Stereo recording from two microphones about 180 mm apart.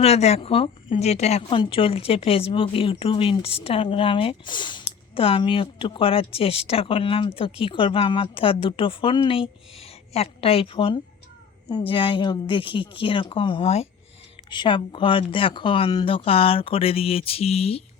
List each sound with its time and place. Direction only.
0.0 s a woman's voice: 35° left (ahead or behind)